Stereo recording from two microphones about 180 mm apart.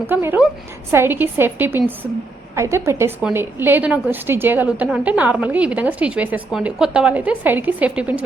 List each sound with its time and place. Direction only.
0.1 s a woman's voice: 10° right (ahead or behind)